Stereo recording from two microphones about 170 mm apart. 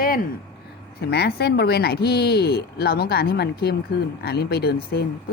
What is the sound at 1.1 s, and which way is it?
Speech, 70° left (ahead or behind).